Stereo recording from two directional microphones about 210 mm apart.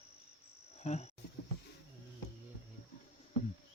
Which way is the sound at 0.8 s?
30° left (ahead or behind).